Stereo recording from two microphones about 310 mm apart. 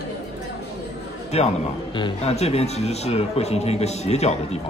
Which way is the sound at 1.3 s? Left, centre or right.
Centre.